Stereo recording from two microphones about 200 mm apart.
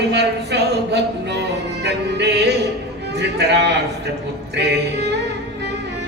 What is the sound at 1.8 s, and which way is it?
Music, 55° right (ahead or behind).